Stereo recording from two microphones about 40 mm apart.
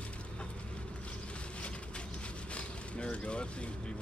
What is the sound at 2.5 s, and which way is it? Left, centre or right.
Boat, left.